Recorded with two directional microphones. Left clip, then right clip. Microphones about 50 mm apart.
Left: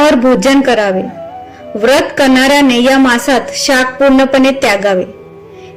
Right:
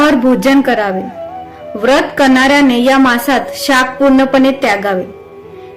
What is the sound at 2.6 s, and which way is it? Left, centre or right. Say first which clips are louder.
A woman's voice: left 1 dB; left.